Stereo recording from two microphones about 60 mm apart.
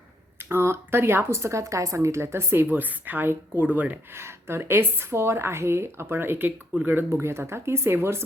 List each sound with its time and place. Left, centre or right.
0.4 s a woman's voice: right
2.6 s speech: right
4.1 s a woman's voice: right
7.1 s a woman's voice: right